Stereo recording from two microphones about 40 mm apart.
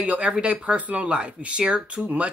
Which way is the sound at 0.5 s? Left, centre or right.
Right.